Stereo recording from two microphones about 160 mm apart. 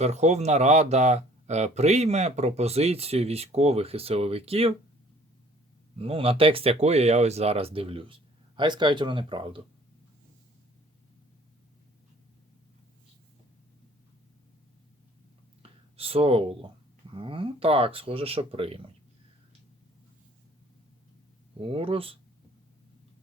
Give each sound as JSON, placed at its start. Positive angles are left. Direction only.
{"t": 0.0, "sound": "speech", "side_deg": -45}
{"t": 6.0, "sound": "speech", "side_deg": -35}
{"t": 15.6, "sound": "a sound", "side_deg": -35}
{"t": 16.0, "sound": "speech", "side_deg": -35}
{"t": 21.6, "sound": "speech", "side_deg": -35}